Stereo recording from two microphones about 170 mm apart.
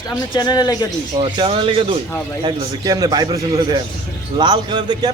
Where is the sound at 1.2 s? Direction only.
30° right (ahead or behind).